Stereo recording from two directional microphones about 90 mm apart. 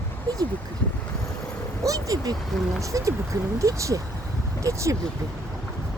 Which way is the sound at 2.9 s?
40° right (ahead or behind).